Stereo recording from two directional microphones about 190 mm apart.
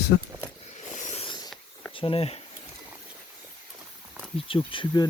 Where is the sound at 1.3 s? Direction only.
20° left (ahead or behind).